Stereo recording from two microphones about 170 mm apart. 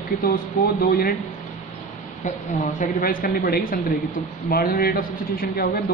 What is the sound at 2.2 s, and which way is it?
A woman's voice, 50° left (ahead or behind).